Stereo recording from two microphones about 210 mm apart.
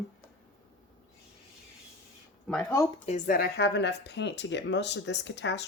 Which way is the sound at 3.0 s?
40° left (ahead or behind).